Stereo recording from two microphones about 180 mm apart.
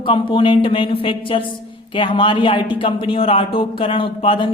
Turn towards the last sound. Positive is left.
turn(degrees=30)  # may be behind; listen again after turning